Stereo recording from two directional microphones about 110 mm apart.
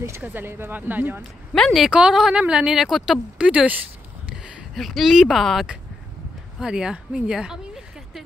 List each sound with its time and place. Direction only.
0.0 s speech: 20° right (ahead or behind)
1.5 s speech: centre (ahead or behind)
4.7 s speech: centre (ahead or behind)
6.6 s a sound: 5° right (ahead or behind)